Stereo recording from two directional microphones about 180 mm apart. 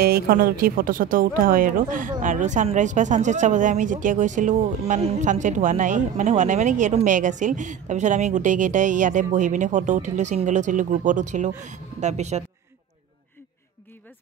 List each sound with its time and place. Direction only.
0.0 s a woman's voice: 60° right (ahead or behind); by 12.4 s 40° right (ahead or behind)